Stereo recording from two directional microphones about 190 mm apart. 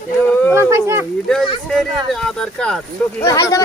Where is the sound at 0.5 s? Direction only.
15° right (ahead or behind).